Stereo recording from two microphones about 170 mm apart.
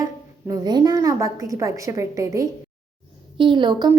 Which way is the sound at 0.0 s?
20° right (ahead or behind).